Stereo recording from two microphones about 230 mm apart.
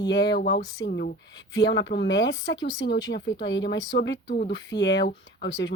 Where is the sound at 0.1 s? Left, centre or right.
Left.